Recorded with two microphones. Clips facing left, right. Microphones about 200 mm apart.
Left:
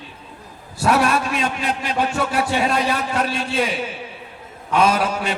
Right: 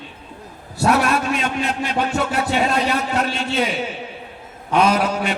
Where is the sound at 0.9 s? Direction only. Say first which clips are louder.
Even; 30° left (ahead or behind).